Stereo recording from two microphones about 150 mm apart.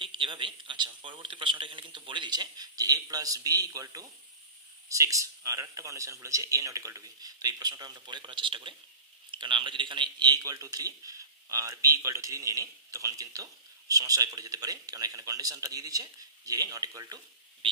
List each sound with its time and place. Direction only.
0.0 s speech: 35° right (ahead or behind)